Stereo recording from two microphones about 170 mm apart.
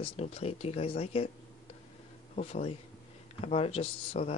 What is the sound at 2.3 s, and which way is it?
Speech, 40° left (ahead or behind).